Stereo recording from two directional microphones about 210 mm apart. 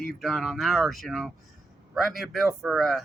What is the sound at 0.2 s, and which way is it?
Speech, centre (ahead or behind).